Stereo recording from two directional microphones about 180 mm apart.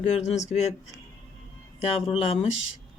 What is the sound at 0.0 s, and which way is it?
Speech, 40° left (ahead or behind).